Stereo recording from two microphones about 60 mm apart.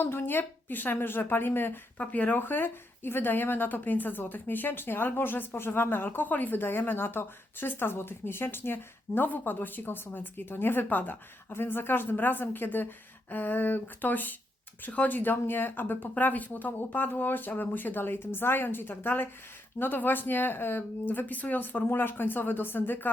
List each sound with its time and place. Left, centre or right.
0.0 s speech: left